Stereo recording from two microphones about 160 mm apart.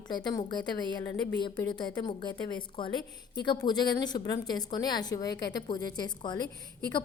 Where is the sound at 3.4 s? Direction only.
25° left (ahead or behind).